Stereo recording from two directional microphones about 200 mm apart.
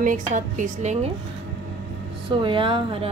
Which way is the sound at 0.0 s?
40° right (ahead or behind).